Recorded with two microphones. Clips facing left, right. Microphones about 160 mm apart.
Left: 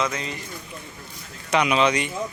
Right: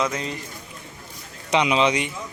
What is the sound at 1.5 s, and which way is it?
Speech, 20° right (ahead or behind).